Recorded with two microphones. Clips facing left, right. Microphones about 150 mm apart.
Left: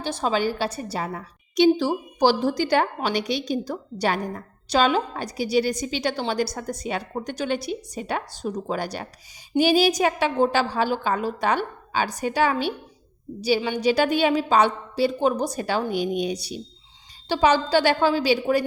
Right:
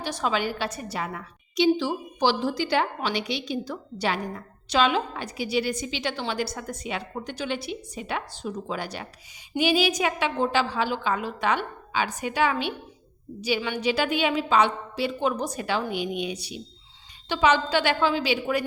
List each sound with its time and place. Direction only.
0.0 s a woman's voice: 30° left (ahead or behind)
1.5 s a woman's voice: 45° left (ahead or behind)